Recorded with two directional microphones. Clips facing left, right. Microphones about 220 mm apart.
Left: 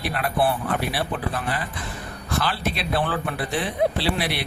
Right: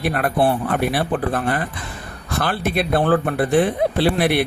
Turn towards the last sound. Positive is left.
turn(degrees=-50)  # may be behind; listen again after turning